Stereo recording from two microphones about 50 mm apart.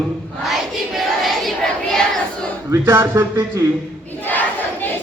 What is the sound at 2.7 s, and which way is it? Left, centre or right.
Speech, right.